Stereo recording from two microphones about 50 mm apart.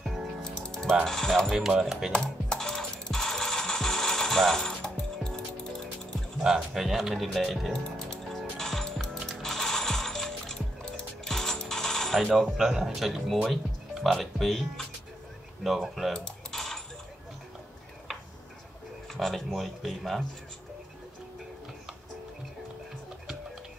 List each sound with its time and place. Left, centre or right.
0.4 s music: centre
1.8 s speech: centre
2.1 s coin: centre
6.4 s speech: centre
7.7 s music: centre
12.5 s speech: centre
16.1 s typing: centre
19.1 s speech: centre